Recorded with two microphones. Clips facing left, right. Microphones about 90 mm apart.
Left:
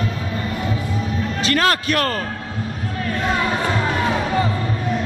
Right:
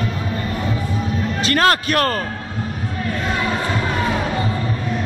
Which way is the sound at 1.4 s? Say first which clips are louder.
Right 2 dB; 50° right (ahead or behind).